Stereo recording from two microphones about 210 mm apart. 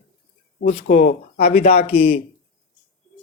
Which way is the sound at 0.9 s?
35° left (ahead or behind).